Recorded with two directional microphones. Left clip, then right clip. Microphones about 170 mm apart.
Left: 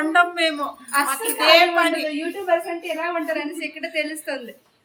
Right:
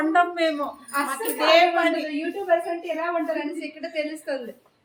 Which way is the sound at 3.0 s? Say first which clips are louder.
Left 2 dB; 5° right (ahead or behind).